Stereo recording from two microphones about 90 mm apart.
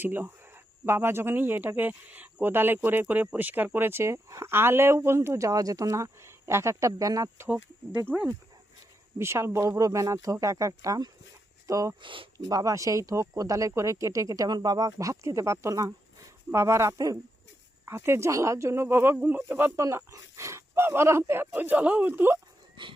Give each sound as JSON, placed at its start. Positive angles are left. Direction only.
{"t": 0.0, "sound": "speech", "side_deg": -25}
{"t": 7.9, "sound": "speech", "side_deg": -20}
{"t": 12.0, "sound": "speech", "side_deg": -70}
{"t": 12.5, "sound": "speech", "side_deg": -40}